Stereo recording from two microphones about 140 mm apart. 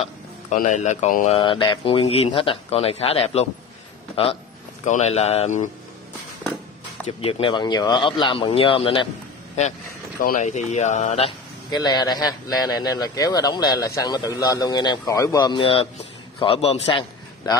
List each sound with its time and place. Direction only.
0.6 s speech: 60° left (ahead or behind)
1.4 s a man's voice: 35° left (ahead or behind)
4.8 s speech: 55° left (ahead or behind)
7.1 s a man's voice: 40° left (ahead or behind)
10.2 s speech: 65° left (ahead or behind)
11.7 s a man's voice: 30° left (ahead or behind)